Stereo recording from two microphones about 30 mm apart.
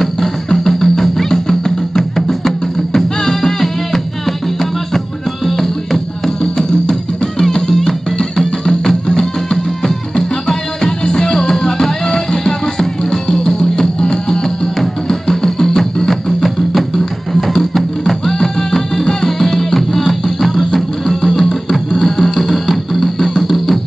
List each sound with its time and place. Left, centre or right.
0.0 s music: centre
7.5 s music: left; by 23.8 s centre